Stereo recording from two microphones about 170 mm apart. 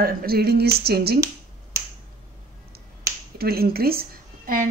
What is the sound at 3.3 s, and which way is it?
A woman's voice, 65° right (ahead or behind).